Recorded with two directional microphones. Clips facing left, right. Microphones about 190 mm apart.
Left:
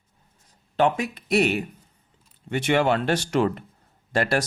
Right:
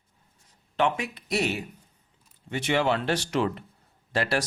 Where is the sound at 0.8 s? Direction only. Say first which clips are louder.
Left 4 dB; 40° left (ahead or behind).